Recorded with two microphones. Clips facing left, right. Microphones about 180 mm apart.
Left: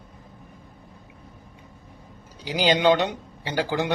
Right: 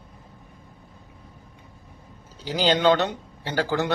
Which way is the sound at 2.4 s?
10° left (ahead or behind).